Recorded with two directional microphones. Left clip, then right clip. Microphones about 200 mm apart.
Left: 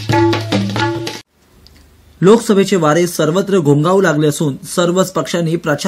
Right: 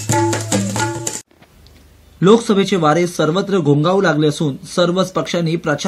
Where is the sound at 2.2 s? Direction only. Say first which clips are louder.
Left 2 dB; 15° left (ahead or behind).